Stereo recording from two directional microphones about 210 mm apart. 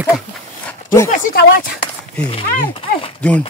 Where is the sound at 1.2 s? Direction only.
50° left (ahead or behind).